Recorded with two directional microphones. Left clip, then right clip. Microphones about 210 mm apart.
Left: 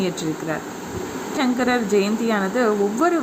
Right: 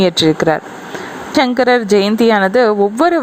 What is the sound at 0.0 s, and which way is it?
A woman's voice, 40° right (ahead or behind).